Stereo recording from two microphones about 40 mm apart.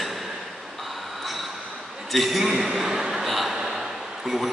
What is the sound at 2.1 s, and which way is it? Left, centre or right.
Speech, centre.